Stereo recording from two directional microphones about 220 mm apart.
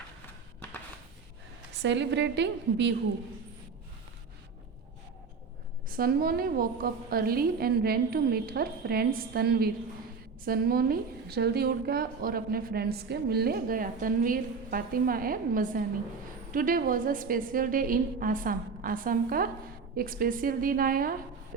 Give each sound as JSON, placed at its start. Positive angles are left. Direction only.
{"t": 1.7, "sound": "a woman's voice", "side_deg": -55}
{"t": 5.9, "sound": "a woman's voice", "side_deg": -40}